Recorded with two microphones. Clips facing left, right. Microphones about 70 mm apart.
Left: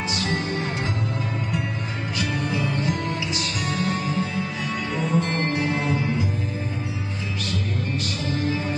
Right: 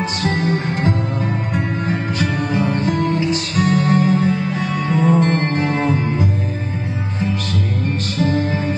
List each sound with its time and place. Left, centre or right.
0.2 s music: right